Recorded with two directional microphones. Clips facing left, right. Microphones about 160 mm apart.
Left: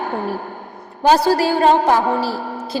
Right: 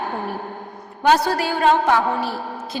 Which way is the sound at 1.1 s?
35° left (ahead or behind).